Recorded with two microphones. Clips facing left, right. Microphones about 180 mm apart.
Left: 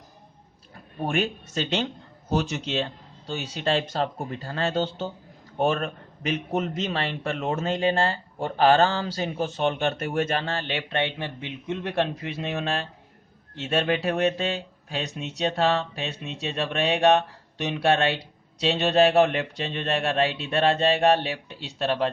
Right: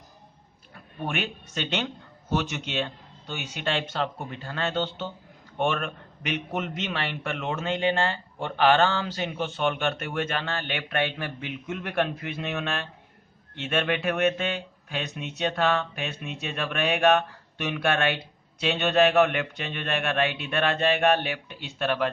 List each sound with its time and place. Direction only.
0.7 s a man's voice: 35° left (ahead or behind)